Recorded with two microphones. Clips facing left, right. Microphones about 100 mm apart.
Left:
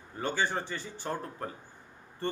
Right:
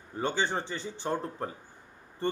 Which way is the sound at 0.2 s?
20° right (ahead or behind).